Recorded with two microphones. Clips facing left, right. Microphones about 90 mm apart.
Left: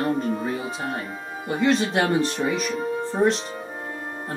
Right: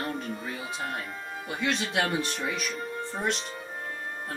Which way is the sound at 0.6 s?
5° left (ahead or behind).